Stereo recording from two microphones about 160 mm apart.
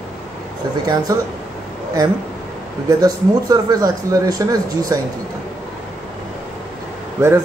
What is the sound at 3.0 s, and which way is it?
Speech, 25° right (ahead or behind).